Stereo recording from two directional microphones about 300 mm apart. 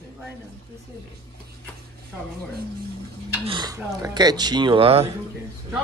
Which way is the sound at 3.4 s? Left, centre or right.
Centre.